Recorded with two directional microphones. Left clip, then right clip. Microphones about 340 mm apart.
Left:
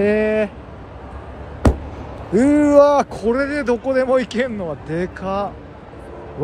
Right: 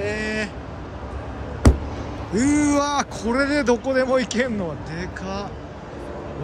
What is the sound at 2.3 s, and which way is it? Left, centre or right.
Speech, centre.